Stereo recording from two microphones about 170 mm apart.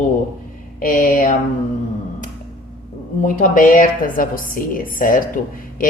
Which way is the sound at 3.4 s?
50° left (ahead or behind).